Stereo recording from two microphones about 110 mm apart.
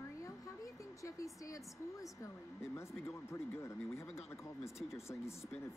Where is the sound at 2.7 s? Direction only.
25° left (ahead or behind).